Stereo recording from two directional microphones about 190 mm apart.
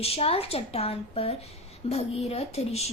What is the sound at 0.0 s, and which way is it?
A woman's voice, 30° left (ahead or behind).